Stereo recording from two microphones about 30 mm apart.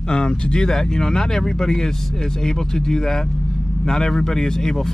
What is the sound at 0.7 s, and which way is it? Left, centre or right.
Speech, centre.